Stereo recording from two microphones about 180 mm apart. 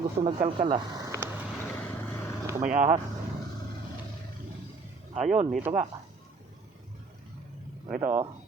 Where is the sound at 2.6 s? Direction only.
45° right (ahead or behind).